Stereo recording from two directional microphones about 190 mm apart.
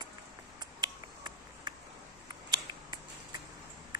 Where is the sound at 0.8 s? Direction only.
20° right (ahead or behind).